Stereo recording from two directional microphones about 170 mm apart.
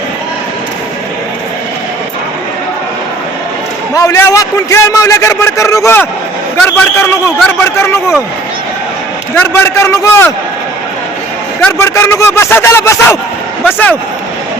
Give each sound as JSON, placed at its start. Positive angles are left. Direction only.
{"t": 3.9, "sound": "a man's voice", "side_deg": 20}
{"t": 9.5, "sound": "a man's voice", "side_deg": 15}
{"t": 11.6, "sound": "a man's voice", "side_deg": 15}